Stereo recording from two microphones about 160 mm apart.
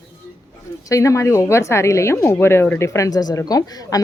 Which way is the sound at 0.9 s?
20° left (ahead or behind).